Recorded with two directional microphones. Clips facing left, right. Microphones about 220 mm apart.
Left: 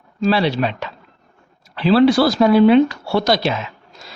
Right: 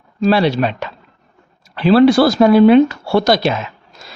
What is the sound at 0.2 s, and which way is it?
Speech, 50° right (ahead or behind).